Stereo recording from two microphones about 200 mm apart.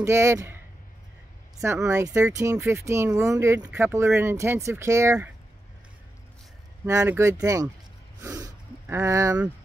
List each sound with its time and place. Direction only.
0.0 s speech: 15° right (ahead or behind)
1.9 s speech: 15° right (ahead or behind)
6.9 s speech: 15° right (ahead or behind)
8.2 s snort: 15° right (ahead or behind)